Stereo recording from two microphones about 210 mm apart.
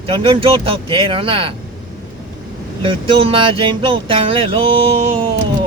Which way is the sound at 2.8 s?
25° right (ahead or behind).